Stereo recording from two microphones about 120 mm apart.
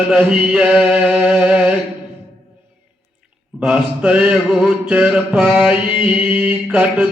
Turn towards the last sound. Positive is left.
turn(degrees=-10)  # may be behind; listen again after turning